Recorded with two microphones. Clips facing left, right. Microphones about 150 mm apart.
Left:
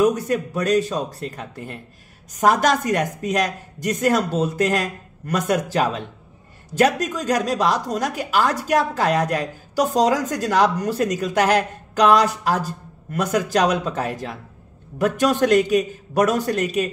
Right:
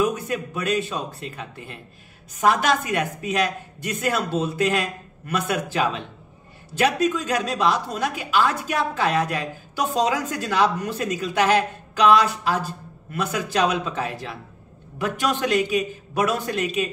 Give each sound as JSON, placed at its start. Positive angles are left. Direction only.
{"t": 0.0, "sound": "speech", "side_deg": 40}